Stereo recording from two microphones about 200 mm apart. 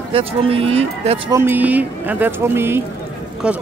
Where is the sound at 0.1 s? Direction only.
30° right (ahead or behind).